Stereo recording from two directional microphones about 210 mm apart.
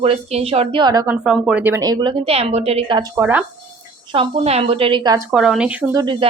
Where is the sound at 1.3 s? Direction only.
5° right (ahead or behind); by 5.2 s 20° right (ahead or behind).